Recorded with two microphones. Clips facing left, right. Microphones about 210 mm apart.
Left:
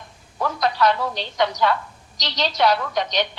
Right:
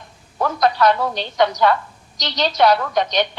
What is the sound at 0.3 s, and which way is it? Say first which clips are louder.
A woman's voice: right 4 dB; 50° right (ahead or behind).